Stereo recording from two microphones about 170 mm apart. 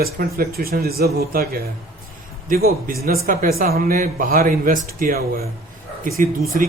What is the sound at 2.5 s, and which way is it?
A man's voice, 60° right (ahead or behind).